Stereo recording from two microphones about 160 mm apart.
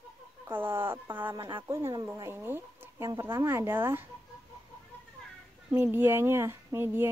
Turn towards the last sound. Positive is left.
turn(degrees=-15)  # may be behind; listen again after turning